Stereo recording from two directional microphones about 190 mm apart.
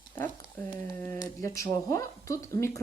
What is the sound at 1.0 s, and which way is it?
Speech, 15° left (ahead or behind).